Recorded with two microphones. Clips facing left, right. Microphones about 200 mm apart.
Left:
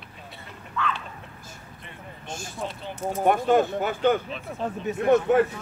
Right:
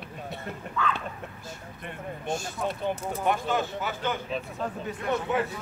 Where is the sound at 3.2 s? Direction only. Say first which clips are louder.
Left 7 dB; 50° left (ahead or behind).